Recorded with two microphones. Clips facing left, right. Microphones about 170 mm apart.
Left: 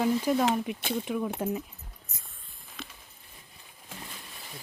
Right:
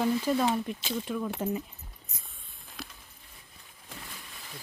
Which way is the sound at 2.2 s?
Centre (ahead or behind).